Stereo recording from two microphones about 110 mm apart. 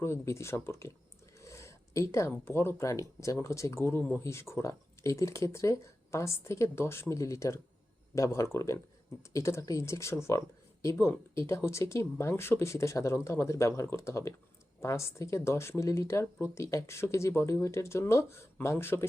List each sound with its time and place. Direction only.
0.0 s speech: 25° left (ahead or behind)
1.4 s a sound: 25° left (ahead or behind)
2.3 s speech: 20° left (ahead or behind)